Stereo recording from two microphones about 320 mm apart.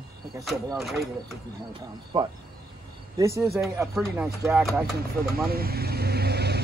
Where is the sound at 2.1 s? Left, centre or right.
Centre.